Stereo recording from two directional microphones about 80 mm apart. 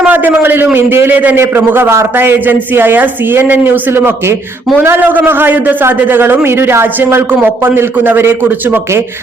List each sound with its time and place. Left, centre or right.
0.1 s a man's voice: right